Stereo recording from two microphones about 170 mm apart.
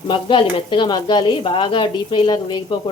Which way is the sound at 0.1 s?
30° left (ahead or behind).